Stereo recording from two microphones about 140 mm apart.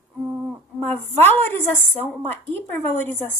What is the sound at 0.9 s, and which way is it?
A woman's voice, 15° left (ahead or behind).